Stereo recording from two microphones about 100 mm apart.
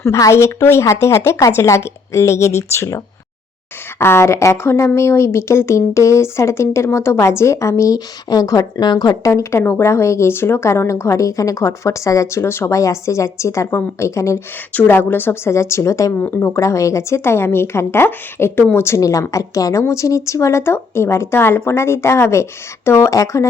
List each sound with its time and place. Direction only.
0.0 s a woman's voice: 30° left (ahead or behind)
9.3 s a woman's voice: 30° left (ahead or behind)